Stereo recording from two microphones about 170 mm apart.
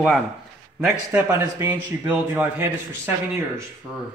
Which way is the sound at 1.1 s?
15° right (ahead or behind).